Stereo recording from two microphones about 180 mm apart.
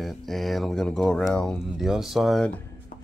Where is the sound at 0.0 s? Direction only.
Centre (ahead or behind).